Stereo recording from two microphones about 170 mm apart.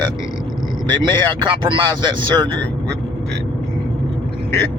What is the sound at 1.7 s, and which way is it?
Speech, 30° right (ahead or behind).